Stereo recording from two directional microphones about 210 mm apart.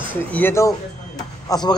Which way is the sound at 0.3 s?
10° left (ahead or behind).